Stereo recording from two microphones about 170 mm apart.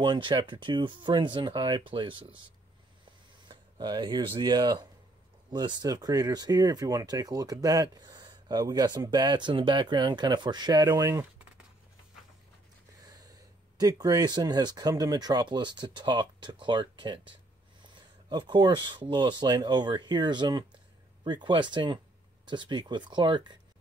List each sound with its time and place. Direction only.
0.0 s speech: 25° right (ahead or behind)
3.4 s speech: 25° right (ahead or behind)
13.7 s speech: 20° right (ahead or behind)
18.3 s speech: 25° right (ahead or behind)